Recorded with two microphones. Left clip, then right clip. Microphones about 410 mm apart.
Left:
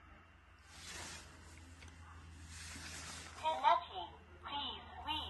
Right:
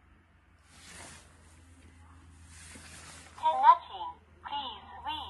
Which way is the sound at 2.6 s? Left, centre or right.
Centre.